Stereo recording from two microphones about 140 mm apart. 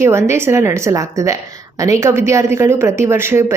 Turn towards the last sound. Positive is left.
turn(degrees=-20)  # may be behind; listen again after turning